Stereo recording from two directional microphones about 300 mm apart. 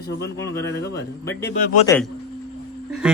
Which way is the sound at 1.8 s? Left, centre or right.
Centre.